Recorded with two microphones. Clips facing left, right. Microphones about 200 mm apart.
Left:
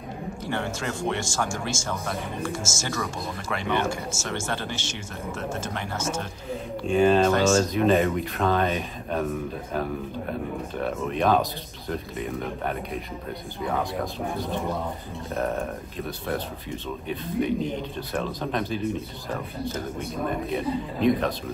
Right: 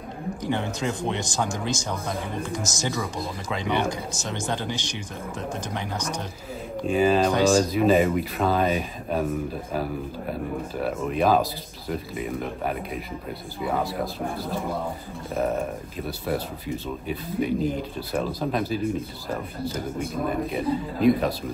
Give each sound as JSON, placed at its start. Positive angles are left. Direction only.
{"t": 0.4, "sound": "speech", "side_deg": -15}
{"t": 6.9, "sound": "speech", "side_deg": 0}
{"t": 7.2, "sound": "speech", "side_deg": -15}
{"t": 7.5, "sound": "speech", "side_deg": -5}
{"t": 10.8, "sound": "speech", "side_deg": -5}
{"t": 14.3, "sound": "speech", "side_deg": -5}